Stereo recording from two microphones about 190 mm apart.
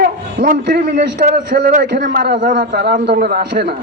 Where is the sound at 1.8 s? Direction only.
65° right (ahead or behind).